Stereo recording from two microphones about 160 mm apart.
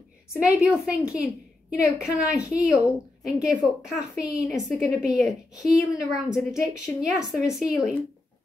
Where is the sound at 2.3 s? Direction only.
20° left (ahead or behind).